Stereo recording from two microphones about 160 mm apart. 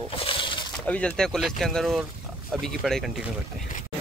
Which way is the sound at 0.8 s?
10° left (ahead or behind).